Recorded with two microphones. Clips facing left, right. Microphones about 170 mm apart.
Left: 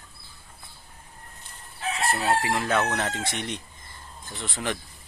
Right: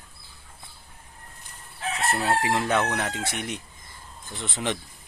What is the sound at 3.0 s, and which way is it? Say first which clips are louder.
Speech: even; 10° right (ahead or behind).